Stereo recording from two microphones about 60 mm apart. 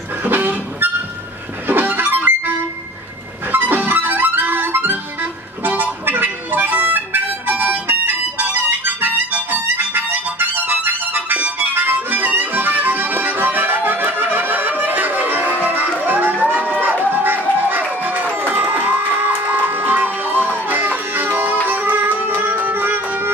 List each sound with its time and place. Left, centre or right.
0.2 s music: right
1.7 s harmonica: right
3.5 s music: right
15.6 s crowd: right
17.1 s music: right